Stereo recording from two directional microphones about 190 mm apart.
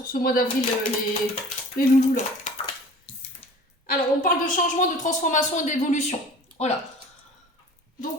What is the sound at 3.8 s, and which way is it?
A woman's voice, 45° left (ahead or behind).